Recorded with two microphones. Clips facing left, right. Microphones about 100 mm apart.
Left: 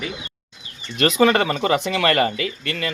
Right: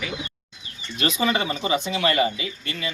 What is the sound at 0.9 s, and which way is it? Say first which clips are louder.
Speech: left 7 dB; 65° left (ahead or behind).